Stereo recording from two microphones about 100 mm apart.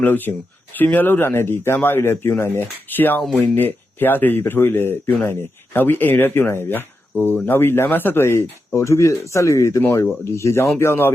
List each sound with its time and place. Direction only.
0.0 s speech: 20° left (ahead or behind)